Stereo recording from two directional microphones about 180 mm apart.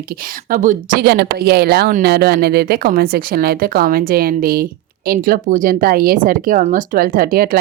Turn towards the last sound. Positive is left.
turn(degrees=-55)  # may be behind; listen again after turning